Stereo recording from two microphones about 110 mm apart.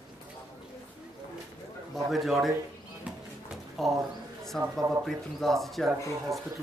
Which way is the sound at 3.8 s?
5° left (ahead or behind).